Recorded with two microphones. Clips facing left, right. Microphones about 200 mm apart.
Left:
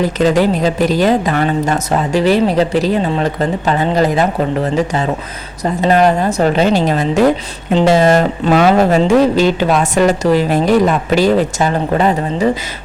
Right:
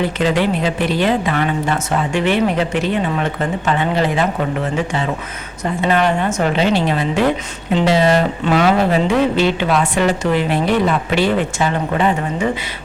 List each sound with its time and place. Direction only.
0.0 s speech: 40° left (ahead or behind)